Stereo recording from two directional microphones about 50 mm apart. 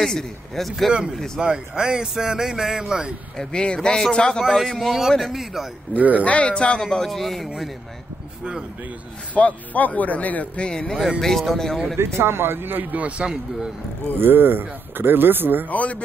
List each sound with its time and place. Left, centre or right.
0.0 s a man's voice: centre
1.4 s speech: centre
3.3 s speech: centre
4.5 s a man's voice: centre
5.9 s speech: right
6.2 s a man's voice: left; by 7.7 s centre
9.3 s a man's voice: left
10.7 s speech: centre
11.1 s a man's voice: centre
12.0 s speech: right
13.0 s a man's voice: centre
14.1 s speech: right
15.7 s speech: left